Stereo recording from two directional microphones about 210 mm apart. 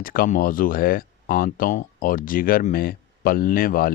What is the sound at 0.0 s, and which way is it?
Speech, 40° left (ahead or behind).